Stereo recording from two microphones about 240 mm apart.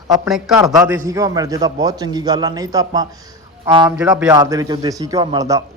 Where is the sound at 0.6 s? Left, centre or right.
Centre.